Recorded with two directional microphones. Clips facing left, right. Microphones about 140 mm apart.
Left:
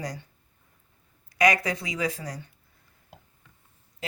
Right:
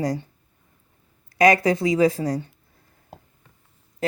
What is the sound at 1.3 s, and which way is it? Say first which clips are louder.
Speech: right 6 dB; 30° right (ahead or behind).